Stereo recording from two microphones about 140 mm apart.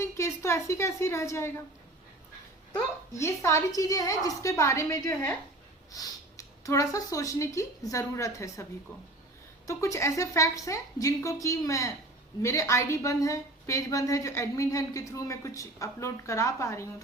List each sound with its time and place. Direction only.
0.0 s a woman's voice: 20° left (ahead or behind)
2.7 s a woman's voice: 20° left (ahead or behind)
9.6 s a woman's voice: 20° left (ahead or behind)